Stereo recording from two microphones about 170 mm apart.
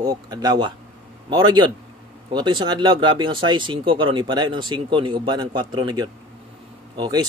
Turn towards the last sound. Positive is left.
turn(degrees=-25)  # may be behind; listen again after turning